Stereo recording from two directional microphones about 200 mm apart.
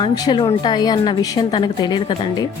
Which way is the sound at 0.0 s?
20° left (ahead or behind).